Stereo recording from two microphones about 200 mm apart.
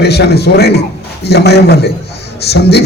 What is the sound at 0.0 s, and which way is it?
A man's voice, 55° left (ahead or behind).